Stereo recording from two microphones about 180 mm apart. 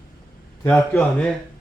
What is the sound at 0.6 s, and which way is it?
Speech, 10° left (ahead or behind).